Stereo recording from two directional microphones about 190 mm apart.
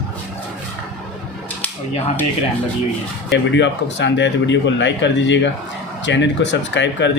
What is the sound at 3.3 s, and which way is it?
A man's voice, 70° left (ahead or behind).